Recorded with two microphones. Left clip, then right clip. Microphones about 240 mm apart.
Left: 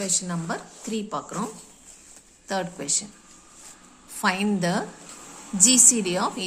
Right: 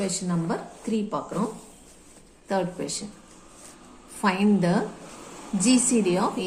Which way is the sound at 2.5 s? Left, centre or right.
Left.